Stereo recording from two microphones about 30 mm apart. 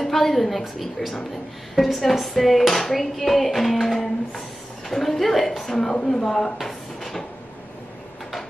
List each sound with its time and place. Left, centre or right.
0.0 s a sound: centre
3.8 s speech: centre
6.0 s speech: centre
6.6 s drawer open or close: centre